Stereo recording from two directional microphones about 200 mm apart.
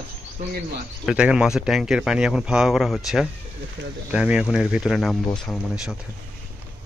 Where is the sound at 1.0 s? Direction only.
5° right (ahead or behind).